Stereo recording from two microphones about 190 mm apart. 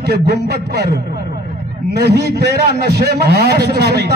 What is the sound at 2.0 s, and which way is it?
A man's voice, 60° right (ahead or behind).